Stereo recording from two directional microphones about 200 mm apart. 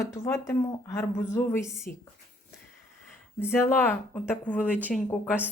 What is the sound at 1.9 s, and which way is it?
Speech, 45° left (ahead or behind).